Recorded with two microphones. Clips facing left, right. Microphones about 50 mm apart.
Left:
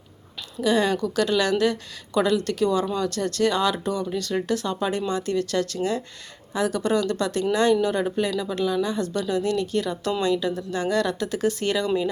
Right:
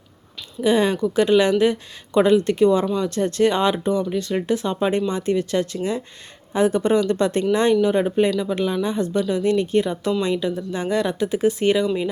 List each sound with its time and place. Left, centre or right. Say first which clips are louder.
0.6 s speech: right 3 dB; right